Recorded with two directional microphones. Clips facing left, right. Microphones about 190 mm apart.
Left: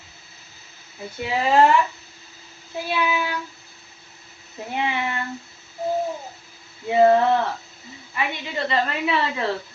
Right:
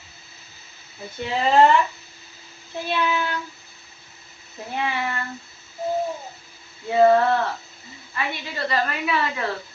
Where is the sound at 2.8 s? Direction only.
10° left (ahead or behind).